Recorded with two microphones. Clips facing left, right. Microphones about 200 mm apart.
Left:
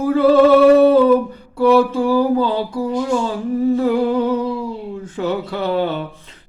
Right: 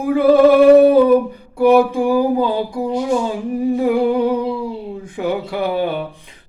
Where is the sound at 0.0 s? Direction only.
15° right (ahead or behind).